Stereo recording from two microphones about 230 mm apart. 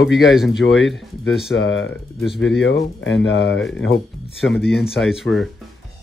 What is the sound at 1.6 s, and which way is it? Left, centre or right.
Speech, left.